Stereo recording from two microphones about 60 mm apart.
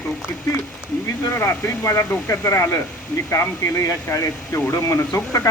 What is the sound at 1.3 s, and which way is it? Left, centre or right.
Speech, left.